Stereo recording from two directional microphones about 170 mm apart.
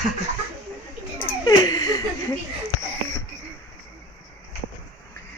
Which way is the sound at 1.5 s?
20° left (ahead or behind).